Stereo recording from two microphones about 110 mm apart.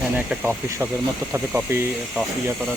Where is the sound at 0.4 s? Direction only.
20° right (ahead or behind).